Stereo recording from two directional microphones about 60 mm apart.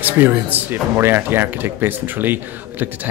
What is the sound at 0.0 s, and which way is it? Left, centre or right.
Speech, right.